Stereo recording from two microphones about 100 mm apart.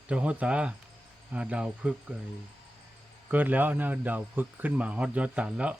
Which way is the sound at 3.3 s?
15° right (ahead or behind).